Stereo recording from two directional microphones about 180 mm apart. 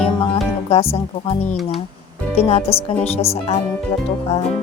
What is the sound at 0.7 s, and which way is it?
Speech, 30° left (ahead or behind).